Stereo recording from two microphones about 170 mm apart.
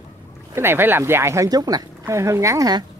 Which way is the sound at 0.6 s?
15° right (ahead or behind).